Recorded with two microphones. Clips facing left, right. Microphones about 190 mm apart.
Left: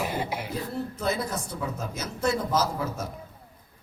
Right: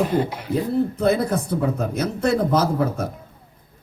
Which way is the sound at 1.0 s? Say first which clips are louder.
Right 9 dB; 60° right (ahead or behind).